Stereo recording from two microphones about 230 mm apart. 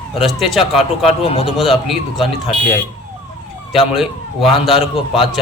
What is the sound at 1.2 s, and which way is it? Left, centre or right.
Speech, left.